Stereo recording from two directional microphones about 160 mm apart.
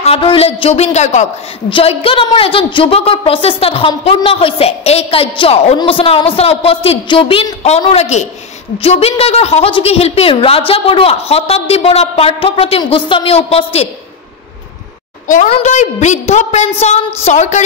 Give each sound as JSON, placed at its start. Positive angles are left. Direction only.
{"t": 0.0, "sound": "a woman's voice", "side_deg": 35}
{"t": 1.7, "sound": "a woman's voice", "side_deg": 35}
{"t": 15.2, "sound": "a woman's voice", "side_deg": 55}